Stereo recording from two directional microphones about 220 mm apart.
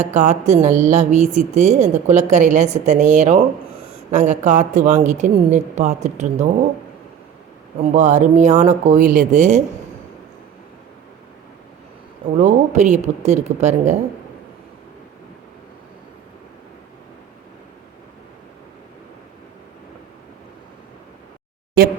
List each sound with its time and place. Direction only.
0.0 s speech: 30° right (ahead or behind)
7.8 s speech: 35° right (ahead or behind)
12.4 s speech: 30° right (ahead or behind)